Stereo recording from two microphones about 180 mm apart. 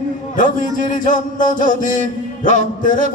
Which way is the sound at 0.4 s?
45° left (ahead or behind).